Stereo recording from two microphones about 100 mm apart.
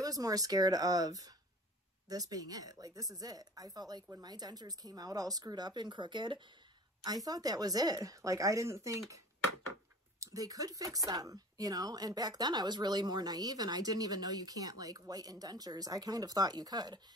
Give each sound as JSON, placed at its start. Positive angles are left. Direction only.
{"t": 0.0, "sound": "speech", "side_deg": -35}
{"t": 7.1, "sound": "speech", "side_deg": -40}
{"t": 10.2, "sound": "speech", "side_deg": -35}